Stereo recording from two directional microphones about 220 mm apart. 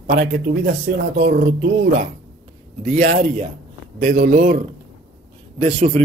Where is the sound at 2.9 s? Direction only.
35° right (ahead or behind).